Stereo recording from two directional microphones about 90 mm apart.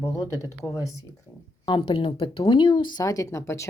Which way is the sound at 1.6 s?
70° left (ahead or behind).